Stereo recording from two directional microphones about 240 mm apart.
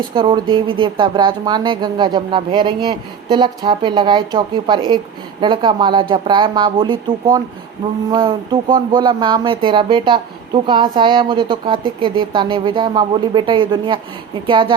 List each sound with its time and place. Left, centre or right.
0.1 s speech: centre